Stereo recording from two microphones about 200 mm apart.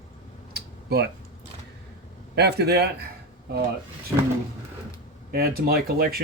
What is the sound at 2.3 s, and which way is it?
Speech, 55° right (ahead or behind).